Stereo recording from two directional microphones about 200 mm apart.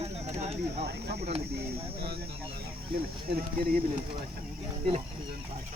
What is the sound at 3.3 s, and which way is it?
Speech, 50° right (ahead or behind).